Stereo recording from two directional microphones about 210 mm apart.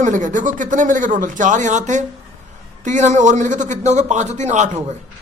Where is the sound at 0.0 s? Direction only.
35° right (ahead or behind).